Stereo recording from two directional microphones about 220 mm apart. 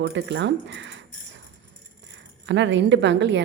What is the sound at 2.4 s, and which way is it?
Speech, 55° right (ahead or behind).